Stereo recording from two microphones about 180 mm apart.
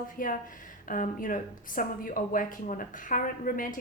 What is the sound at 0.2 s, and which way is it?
A woman's voice, 50° left (ahead or behind).